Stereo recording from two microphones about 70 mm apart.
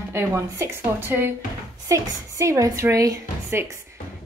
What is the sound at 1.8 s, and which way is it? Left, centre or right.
A woman's voice, right.